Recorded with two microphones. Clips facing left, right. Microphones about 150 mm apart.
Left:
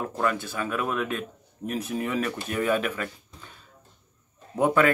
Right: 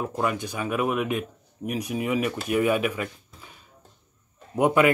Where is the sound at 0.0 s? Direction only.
15° right (ahead or behind).